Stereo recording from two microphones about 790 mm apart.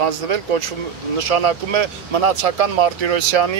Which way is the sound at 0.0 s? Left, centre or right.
Right.